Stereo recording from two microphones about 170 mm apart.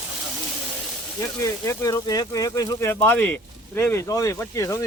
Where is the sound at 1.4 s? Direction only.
20° left (ahead or behind).